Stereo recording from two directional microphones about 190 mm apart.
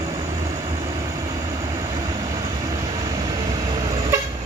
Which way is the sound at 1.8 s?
20° right (ahead or behind).